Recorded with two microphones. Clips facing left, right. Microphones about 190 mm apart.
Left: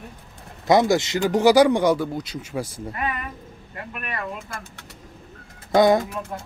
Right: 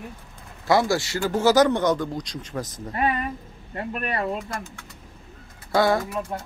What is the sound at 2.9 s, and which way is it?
Speech, 30° right (ahead or behind).